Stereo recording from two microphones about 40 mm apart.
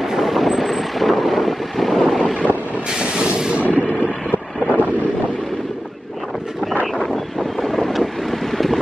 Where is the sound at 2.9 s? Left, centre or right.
Right.